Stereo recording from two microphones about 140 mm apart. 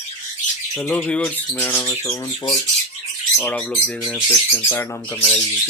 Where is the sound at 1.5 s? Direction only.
20° left (ahead or behind).